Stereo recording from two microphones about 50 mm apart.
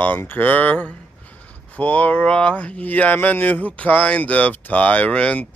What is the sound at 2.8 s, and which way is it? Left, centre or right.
Speech, left.